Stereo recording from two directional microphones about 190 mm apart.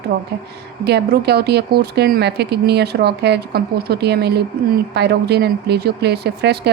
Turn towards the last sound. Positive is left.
turn(degrees=-60)  # may be behind; listen again after turning